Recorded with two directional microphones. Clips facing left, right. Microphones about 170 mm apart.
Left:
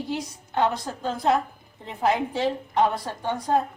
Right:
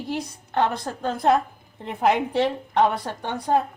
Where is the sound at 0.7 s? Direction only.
60° right (ahead or behind).